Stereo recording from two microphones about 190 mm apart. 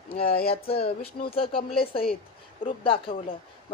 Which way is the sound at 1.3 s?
30° left (ahead or behind).